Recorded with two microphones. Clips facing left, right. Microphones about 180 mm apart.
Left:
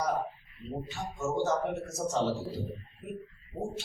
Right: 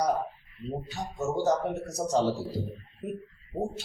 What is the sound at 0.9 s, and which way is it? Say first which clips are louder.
A man's voice: right 2 dB; 35° right (ahead or behind).